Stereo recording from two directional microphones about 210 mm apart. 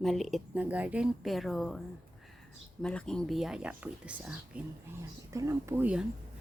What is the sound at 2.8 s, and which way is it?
Speech, 5° left (ahead or behind).